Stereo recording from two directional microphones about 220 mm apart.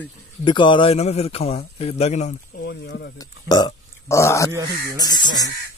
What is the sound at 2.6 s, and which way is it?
Speech, 50° left (ahead or behind).